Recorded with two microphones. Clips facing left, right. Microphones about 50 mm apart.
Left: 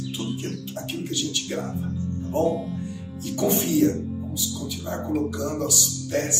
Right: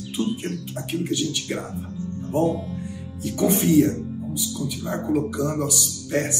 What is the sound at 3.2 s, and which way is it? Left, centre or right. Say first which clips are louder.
Speech: right 2 dB; centre.